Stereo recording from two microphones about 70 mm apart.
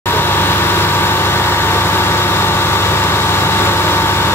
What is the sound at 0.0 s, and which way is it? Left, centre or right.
Vehicle, left.